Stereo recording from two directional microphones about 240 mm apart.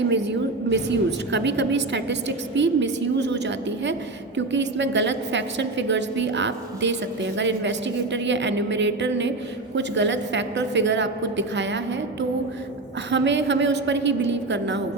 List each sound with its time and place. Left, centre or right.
0.1 s a woman's voice: right
13.1 s a woman's voice: right